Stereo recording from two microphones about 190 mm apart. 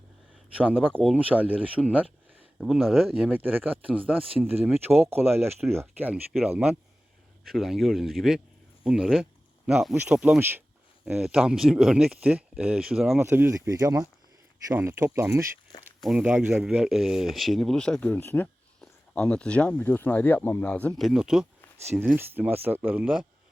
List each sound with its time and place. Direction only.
0.6 s speech: 5° right (ahead or behind)
16.0 s speech: 5° right (ahead or behind)
21.0 s speech: centre (ahead or behind)